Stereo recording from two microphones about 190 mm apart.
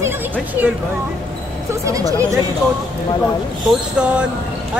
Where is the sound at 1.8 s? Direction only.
15° right (ahead or behind).